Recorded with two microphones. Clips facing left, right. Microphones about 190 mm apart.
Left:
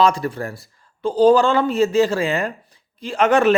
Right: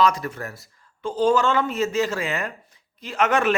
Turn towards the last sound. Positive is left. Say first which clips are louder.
# left 5 dB
turn(degrees=30)  # may be behind; listen again after turning